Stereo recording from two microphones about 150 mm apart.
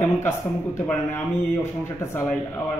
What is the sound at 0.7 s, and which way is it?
A man's voice, 15° left (ahead or behind).